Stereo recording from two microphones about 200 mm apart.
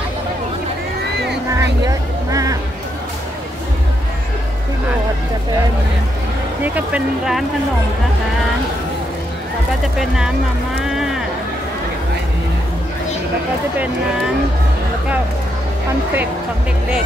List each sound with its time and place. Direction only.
1.6 s speech: 15° right (ahead or behind)
6.6 s speech: 5° right (ahead or behind)
9.9 s speech: 5° right (ahead or behind)
10.8 s music: centre (ahead or behind)